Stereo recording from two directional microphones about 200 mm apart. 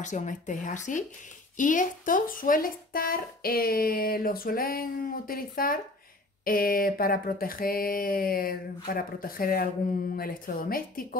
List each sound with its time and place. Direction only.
0.0 s speech: 35° left (ahead or behind)